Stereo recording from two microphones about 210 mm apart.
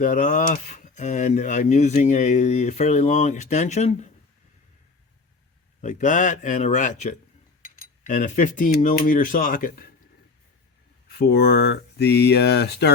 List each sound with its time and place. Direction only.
0.0 s speech: 40° left (ahead or behind)
5.8 s speech: 35° left (ahead or behind)
11.1 s speech: 50° left (ahead or behind)